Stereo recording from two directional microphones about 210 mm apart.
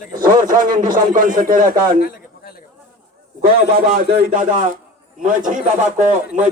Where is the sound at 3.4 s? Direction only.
45° right (ahead or behind).